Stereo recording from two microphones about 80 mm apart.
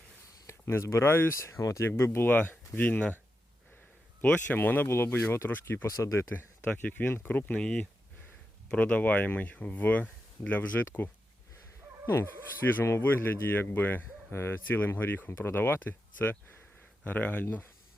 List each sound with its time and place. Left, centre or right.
0.4 s speech: left
1.9 s speech: left
4.2 s speech: centre; by 6.2 s left
6.3 s speech: left